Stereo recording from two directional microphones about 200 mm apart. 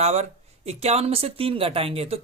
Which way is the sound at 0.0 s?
35° right (ahead or behind).